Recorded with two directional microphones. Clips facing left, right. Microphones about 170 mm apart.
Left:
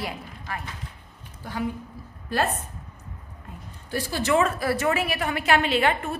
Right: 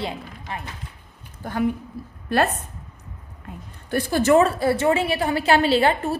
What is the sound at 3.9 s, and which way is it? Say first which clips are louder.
Speech: right 6 dB; 50° right (ahead or behind).